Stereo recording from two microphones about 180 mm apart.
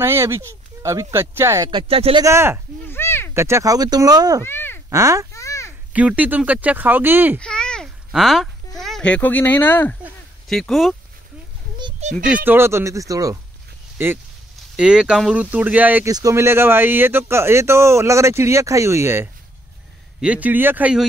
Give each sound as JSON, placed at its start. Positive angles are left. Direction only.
{"t": 0.0, "sound": "speech", "side_deg": -15}
{"t": 1.7, "sound": "speech", "side_deg": -30}
{"t": 2.2, "sound": "speech", "side_deg": -15}
{"t": 2.9, "sound": "a sound", "side_deg": 15}
{"t": 3.3, "sound": "speech", "side_deg": -15}
{"t": 4.4, "sound": "a sound", "side_deg": 10}
{"t": 4.8, "sound": "speech", "side_deg": -20}
{"t": 5.3, "sound": "babbling", "side_deg": 15}
{"t": 5.9, "sound": "speech", "side_deg": -10}
{"t": 7.3, "sound": "a sound", "side_deg": 5}
{"t": 10.5, "sound": "speech", "side_deg": 0}
{"t": 12.0, "sound": "a child's voice", "side_deg": -35}
{"t": 12.4, "sound": "speech", "side_deg": -15}